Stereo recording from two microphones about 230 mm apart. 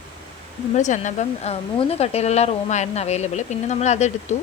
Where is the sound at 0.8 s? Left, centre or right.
Left.